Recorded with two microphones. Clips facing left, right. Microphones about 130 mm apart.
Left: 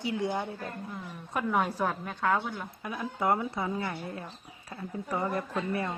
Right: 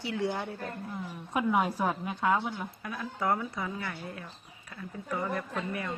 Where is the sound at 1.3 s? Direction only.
10° right (ahead or behind).